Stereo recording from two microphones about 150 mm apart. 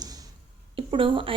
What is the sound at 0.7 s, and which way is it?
Speech, 35° right (ahead or behind).